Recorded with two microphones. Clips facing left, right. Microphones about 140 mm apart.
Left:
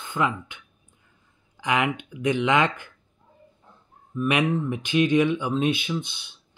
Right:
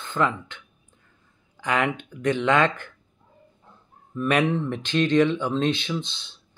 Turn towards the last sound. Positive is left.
turn(degrees=15)  # may be behind; listen again after turning